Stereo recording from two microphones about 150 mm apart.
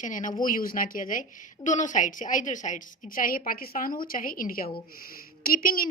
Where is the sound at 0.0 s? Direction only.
60° left (ahead or behind).